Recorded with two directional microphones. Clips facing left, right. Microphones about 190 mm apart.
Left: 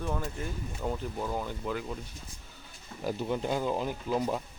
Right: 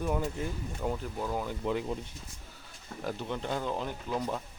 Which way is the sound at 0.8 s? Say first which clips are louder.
Even; centre (ahead or behind).